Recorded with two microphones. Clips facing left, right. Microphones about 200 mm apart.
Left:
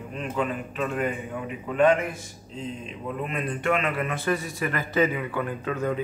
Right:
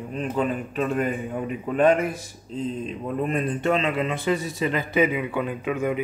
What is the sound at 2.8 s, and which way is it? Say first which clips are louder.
A man's voice: right 5 dB; 40° right (ahead or behind).